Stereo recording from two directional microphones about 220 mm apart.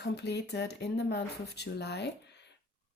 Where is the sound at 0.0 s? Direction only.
50° left (ahead or behind).